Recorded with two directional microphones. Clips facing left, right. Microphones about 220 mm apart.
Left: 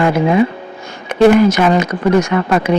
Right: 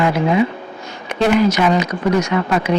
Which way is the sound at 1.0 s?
50° left (ahead or behind).